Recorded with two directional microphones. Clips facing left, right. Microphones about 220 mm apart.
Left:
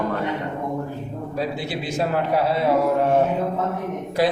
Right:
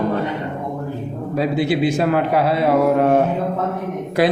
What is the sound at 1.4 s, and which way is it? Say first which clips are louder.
A man's voice: right 9 dB; 65° right (ahead or behind).